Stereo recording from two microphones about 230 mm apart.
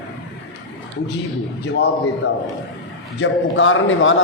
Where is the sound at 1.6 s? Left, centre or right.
Left.